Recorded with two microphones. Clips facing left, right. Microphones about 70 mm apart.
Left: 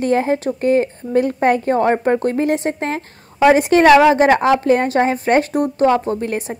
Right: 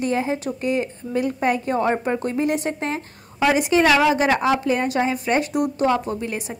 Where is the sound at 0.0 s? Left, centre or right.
Left.